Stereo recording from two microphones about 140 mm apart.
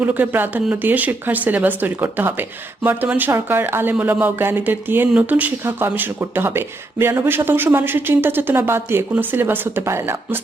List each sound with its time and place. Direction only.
0.0 s speech: 15° right (ahead or behind)